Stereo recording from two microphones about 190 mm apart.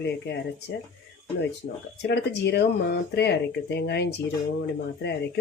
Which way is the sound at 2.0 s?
65° left (ahead or behind).